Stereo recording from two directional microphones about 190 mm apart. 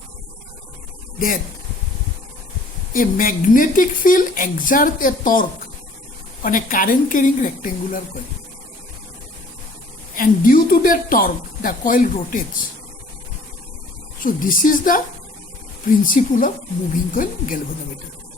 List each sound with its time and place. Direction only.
2.9 s speech: 45° left (ahead or behind)
10.2 s speech: 45° left (ahead or behind)
14.3 s speech: 45° left (ahead or behind)